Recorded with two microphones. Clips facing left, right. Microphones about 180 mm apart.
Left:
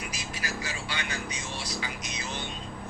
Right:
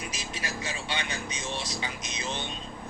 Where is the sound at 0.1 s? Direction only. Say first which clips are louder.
Even; 25° right (ahead or behind).